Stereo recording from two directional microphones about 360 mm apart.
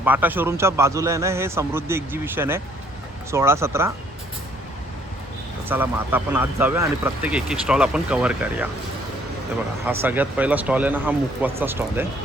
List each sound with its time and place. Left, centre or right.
0.0 s a man's voice: centre
5.6 s speech: centre
9.8 s speech: centre